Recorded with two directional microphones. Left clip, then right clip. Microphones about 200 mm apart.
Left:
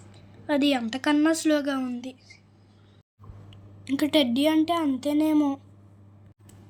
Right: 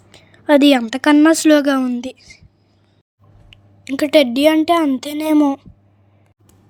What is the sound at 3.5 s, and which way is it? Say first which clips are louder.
A woman's voice: right 6 dB; 40° right (ahead or behind).